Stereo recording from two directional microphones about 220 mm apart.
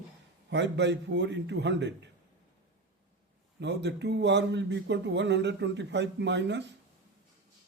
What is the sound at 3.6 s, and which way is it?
Speech, 50° right (ahead or behind).